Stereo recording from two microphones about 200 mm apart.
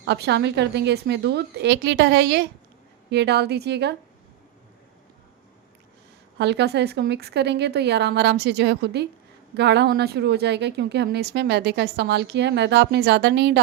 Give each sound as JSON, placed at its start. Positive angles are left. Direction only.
{"t": 0.0, "sound": "a woman's voice", "side_deg": -55}
{"t": 6.4, "sound": "a woman's voice", "side_deg": -60}